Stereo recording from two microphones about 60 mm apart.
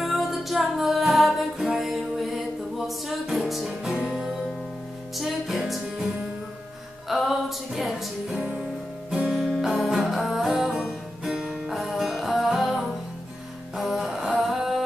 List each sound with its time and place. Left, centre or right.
0.0 s music: centre
3.4 s music: centre
5.1 s music: centre
7.1 s music: centre